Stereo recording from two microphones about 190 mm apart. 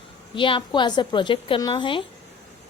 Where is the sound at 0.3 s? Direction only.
25° left (ahead or behind).